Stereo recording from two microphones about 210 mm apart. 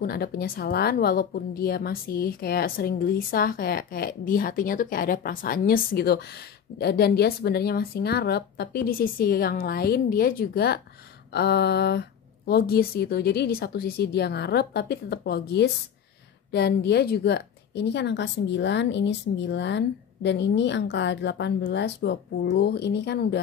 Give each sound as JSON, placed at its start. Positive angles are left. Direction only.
{"t": 0.0, "sound": "a woman's voice", "side_deg": 50}